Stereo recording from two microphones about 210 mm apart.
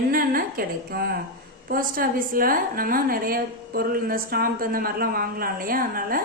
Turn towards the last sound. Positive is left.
turn(degrees=-45)  # may be behind; listen again after turning